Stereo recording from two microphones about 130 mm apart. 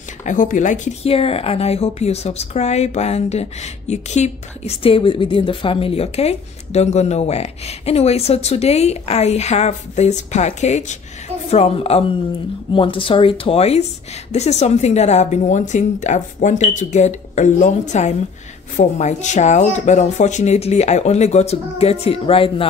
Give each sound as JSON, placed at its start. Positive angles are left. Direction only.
{"t": 0.2, "sound": "speech", "side_deg": 80}
{"t": 1.0, "sound": "a woman's voice", "side_deg": 50}
{"t": 11.5, "sound": "a woman's voice", "side_deg": 50}